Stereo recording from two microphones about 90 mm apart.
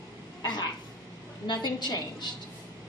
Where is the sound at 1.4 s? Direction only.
50° left (ahead or behind).